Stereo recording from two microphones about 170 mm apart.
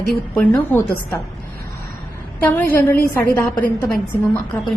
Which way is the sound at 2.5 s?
10° left (ahead or behind).